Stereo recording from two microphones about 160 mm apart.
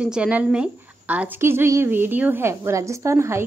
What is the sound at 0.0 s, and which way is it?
A woman's voice, 5° right (ahead or behind).